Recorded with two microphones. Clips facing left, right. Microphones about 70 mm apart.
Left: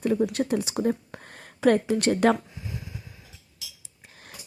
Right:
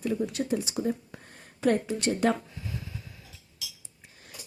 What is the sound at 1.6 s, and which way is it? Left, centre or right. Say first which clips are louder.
Speech: left 5 dB; left.